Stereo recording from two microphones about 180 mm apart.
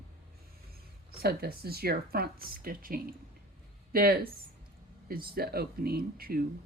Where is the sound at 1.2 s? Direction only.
60° right (ahead or behind).